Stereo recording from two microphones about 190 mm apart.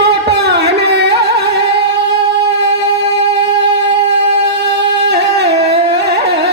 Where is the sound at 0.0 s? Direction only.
60° right (ahead or behind).